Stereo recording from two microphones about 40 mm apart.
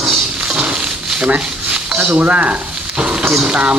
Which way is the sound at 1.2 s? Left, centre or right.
Right.